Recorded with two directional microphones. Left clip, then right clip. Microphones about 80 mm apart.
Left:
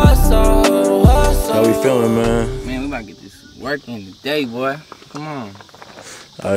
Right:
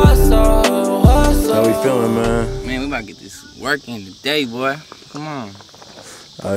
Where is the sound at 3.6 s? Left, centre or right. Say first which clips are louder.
Right 3 dB; centre.